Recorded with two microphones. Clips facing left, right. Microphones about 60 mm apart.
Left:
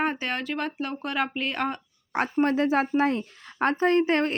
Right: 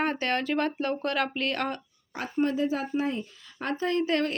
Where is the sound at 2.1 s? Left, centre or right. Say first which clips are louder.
Left 4 dB; left.